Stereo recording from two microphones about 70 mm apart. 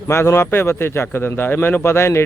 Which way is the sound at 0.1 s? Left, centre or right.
Left.